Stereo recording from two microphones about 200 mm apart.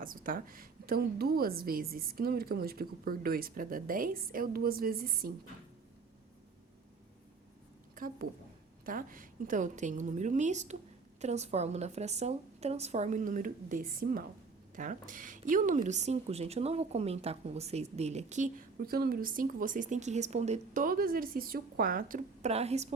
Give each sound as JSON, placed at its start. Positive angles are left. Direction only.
{"t": 0.0, "sound": "a woman's voice", "side_deg": -45}
{"t": 7.9, "sound": "a woman's voice", "side_deg": -45}